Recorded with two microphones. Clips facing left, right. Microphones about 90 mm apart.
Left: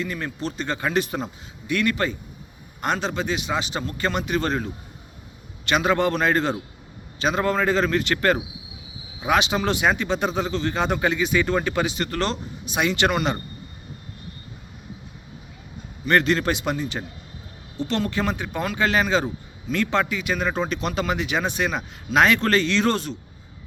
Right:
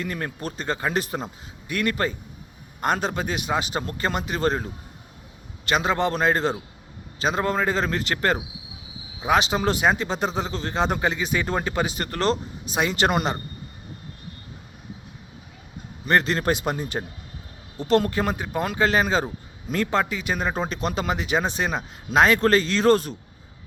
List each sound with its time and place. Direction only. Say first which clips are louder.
0.0 s speech: left 1 dB; 45° right (ahead or behind)
16.0 s speech: left 1 dB; 30° right (ahead or behind)